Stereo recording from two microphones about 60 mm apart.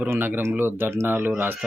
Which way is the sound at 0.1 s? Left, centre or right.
Right.